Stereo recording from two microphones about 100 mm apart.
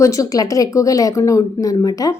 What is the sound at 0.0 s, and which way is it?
Speech, 35° left (ahead or behind).